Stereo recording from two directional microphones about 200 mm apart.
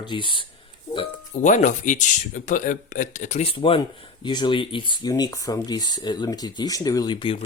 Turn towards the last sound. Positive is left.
turn(degrees=25)  # may be behind; listen again after turning